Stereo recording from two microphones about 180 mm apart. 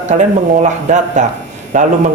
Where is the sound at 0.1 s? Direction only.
40° right (ahead or behind).